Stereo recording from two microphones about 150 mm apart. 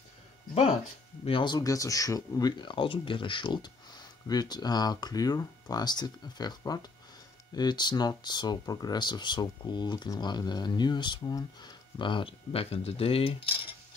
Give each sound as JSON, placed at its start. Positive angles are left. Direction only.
{"t": 1.2, "sound": "speech", "side_deg": 35}